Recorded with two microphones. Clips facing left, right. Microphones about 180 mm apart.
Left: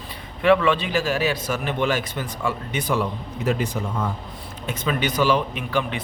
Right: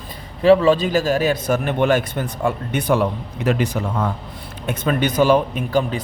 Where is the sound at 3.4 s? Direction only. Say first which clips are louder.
Right 4 dB; 85° right.